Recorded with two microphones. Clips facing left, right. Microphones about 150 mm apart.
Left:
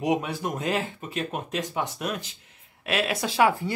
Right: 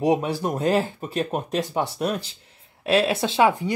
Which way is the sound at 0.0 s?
35° right (ahead or behind).